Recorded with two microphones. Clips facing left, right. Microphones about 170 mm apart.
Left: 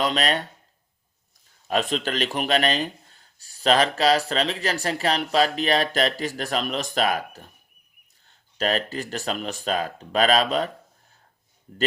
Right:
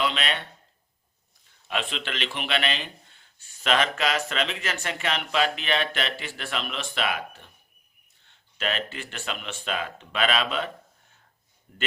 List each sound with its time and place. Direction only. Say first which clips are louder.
0.0 s speech: left 4 dB; 40° left (ahead or behind)
1.6 s speech: left 7 dB; 40° left (ahead or behind)
11.7 s speech: left 8 dB; 35° left (ahead or behind)